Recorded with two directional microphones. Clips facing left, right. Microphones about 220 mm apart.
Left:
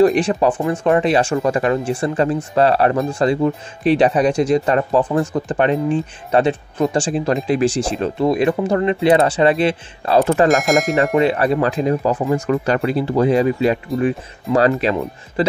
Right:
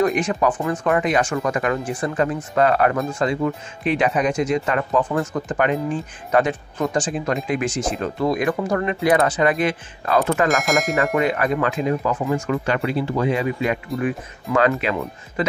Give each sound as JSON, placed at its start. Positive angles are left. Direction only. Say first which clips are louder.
{"t": 0.0, "sound": "speech", "louder": "left 5 dB", "side_deg": 30}
{"t": 10.5, "sound": "speech", "louder": "left 5 dB", "side_deg": 0}
{"t": 11.1, "sound": "speech", "louder": "left 4 dB", "side_deg": 30}